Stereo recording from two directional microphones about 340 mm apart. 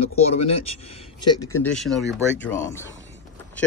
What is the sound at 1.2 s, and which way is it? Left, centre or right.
Speech, centre.